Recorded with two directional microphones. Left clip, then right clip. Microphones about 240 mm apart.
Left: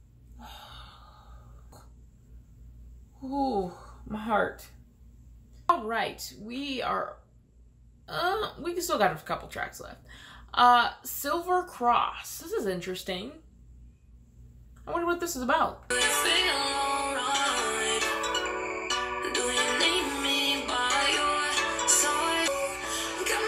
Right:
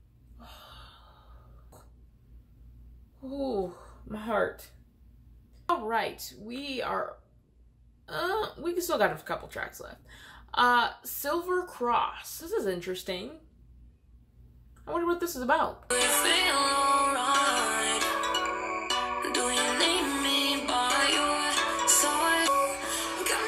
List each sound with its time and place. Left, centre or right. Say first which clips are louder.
3.3 s speech: left 3 dB; centre
5.7 s speech: left 2 dB; centre
8.1 s speech: left 2 dB; centre
14.9 s speech: even; centre
15.9 s music: right 1 dB; right